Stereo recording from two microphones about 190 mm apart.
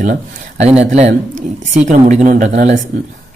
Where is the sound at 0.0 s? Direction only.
40° right (ahead or behind).